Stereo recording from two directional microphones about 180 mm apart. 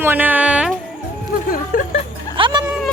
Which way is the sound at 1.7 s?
50° left (ahead or behind).